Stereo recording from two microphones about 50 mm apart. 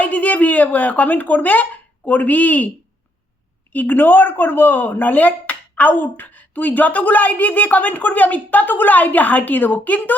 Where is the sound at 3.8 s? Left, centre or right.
Left.